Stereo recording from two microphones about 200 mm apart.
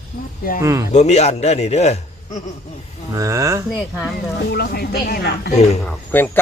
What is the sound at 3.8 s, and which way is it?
Speech, 5° left (ahead or behind).